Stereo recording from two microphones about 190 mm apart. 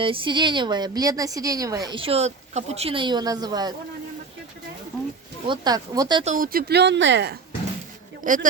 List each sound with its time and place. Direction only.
0.0 s speech: 25° right (ahead or behind)
5.5 s speech: 20° right (ahead or behind)
6.2 s speech: 45° right (ahead or behind); by 7.3 s 65° right (ahead or behind)
8.2 s speech: 45° right (ahead or behind)